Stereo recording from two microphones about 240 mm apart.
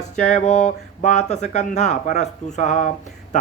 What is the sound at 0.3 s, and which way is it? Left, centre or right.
Speech, left.